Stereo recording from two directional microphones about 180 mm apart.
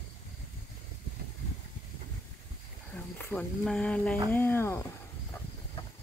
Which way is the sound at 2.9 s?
10° left (ahead or behind).